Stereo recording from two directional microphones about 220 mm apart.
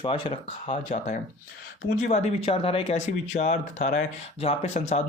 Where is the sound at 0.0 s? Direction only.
25° left (ahead or behind).